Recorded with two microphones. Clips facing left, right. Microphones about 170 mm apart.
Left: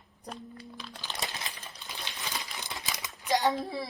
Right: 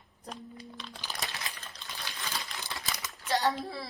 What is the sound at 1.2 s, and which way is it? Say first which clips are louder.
Crumpling: left 3 dB; 20° left (ahead or behind).